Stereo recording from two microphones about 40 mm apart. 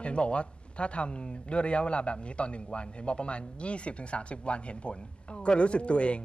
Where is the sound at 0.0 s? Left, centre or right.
Left.